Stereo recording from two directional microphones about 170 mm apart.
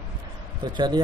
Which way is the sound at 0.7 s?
25° right (ahead or behind).